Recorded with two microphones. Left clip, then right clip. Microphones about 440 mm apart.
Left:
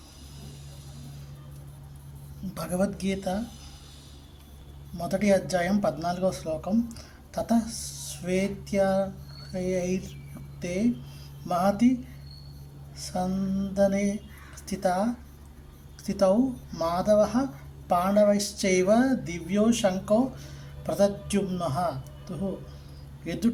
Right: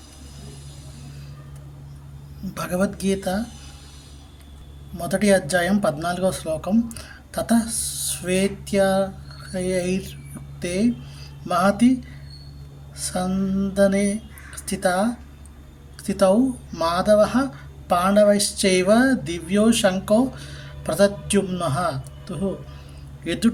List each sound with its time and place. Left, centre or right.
2.6 s speech: left
4.9 s speech: left
13.0 s a man's voice: left